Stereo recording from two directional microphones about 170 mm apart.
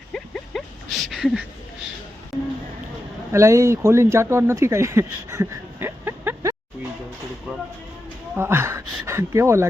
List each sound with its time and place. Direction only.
0.1 s a sound: centre (ahead or behind)
3.3 s speech: 15° right (ahead or behind)
8.4 s speech: 15° right (ahead or behind)